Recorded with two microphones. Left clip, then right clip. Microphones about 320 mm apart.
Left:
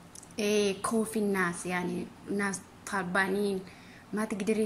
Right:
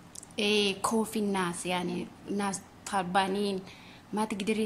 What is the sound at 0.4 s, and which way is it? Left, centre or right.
A woman's voice, right.